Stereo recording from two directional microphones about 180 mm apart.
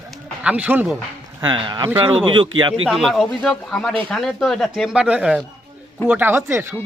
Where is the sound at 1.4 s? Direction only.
25° right (ahead or behind).